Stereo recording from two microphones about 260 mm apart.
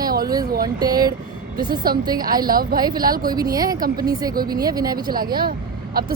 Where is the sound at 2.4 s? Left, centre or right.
Right.